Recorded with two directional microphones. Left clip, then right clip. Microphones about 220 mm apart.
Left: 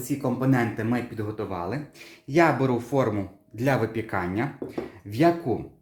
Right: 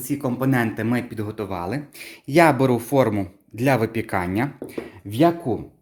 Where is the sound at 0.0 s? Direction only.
35° right (ahead or behind).